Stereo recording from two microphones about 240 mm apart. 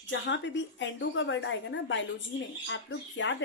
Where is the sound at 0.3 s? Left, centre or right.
Left.